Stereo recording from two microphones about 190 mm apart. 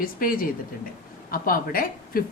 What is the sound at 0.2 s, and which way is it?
A woman's voice, 50° left (ahead or behind).